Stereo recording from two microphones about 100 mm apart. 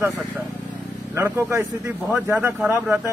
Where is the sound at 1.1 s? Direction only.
25° right (ahead or behind).